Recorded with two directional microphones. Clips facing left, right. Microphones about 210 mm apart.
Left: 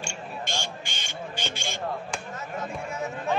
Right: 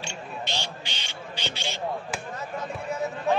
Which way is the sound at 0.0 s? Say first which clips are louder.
Even; 50° left (ahead or behind).